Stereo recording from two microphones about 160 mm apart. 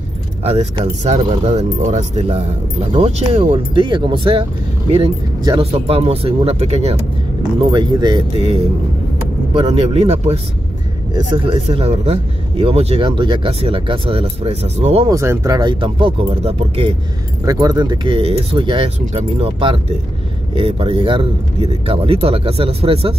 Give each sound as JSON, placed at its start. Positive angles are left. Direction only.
{"t": 0.4, "sound": "speech", "side_deg": -40}
{"t": 3.8, "sound": "speech", "side_deg": -30}
{"t": 7.7, "sound": "speech", "side_deg": -25}
{"t": 15.0, "sound": "speech", "side_deg": -20}
{"t": 17.5, "sound": "speech", "side_deg": -25}